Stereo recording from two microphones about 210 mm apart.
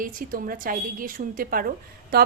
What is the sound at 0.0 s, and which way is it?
A woman's voice, 40° right (ahead or behind).